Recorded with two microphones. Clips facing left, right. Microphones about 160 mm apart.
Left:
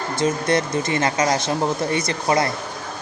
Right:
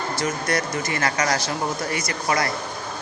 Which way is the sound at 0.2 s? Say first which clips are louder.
Left 7 dB; 25° left (ahead or behind).